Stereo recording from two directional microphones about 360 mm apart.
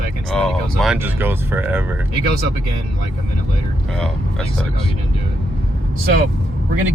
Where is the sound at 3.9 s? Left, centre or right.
Centre.